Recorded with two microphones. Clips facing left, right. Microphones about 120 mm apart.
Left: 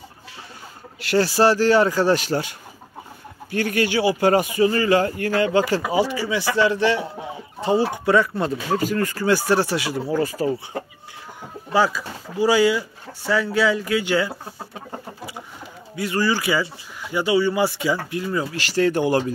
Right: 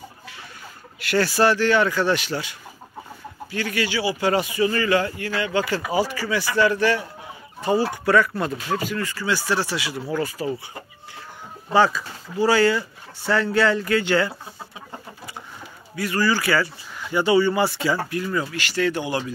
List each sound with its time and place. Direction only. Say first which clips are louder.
1.0 s speech: left 2 dB; 35° left (ahead or behind)
3.5 s speech: left 4 dB; 50° left (ahead or behind)
5.9 s speech: left 2 dB; 20° left (ahead or behind)
8.7 s speech: left 4 dB; 40° left (ahead or behind)
11.7 s speech: right 1 dB; 5° left (ahead or behind)
16.0 s speech: even; 20° left (ahead or behind)
18.1 s speech: left 1 dB; 25° left (ahead or behind); by 19.3 s 45° left (ahead or behind)